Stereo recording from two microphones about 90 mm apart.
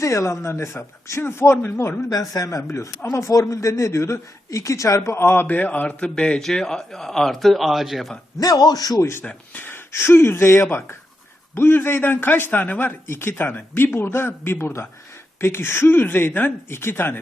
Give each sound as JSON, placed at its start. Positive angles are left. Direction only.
{"t": 0.0, "sound": "a man's voice", "side_deg": 35}
{"t": 2.0, "sound": "a man's voice", "side_deg": 40}
{"t": 8.4, "sound": "a man's voice", "side_deg": 45}
{"t": 9.0, "sound": "a man's voice", "side_deg": 30}
{"t": 9.2, "sound": "a man's voice", "side_deg": 20}